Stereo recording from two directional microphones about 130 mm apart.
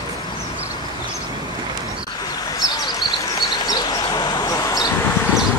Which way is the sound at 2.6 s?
30° left (ahead or behind).